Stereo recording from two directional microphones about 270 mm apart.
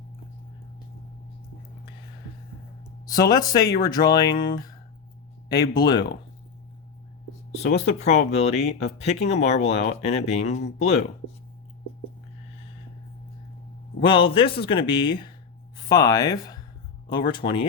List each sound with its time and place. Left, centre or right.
3.1 s speech: centre
5.5 s speech: centre
7.5 s speech: left
14.0 s speech: centre